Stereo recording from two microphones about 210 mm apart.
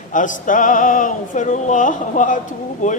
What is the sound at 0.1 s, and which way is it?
A man's voice, 40° left (ahead or behind).